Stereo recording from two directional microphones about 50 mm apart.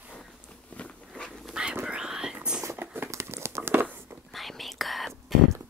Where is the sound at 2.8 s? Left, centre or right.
Right.